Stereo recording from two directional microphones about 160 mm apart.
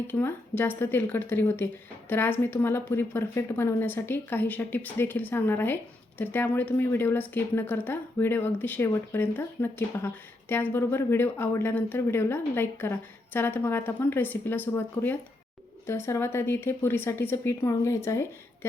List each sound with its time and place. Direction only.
0.1 s speech: 10° left (ahead or behind)